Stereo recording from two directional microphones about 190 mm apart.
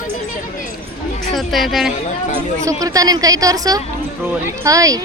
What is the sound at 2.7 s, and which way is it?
A woman's voice, 20° right (ahead or behind).